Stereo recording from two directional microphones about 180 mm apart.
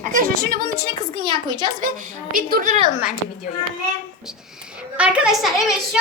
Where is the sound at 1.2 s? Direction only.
25° right (ahead or behind).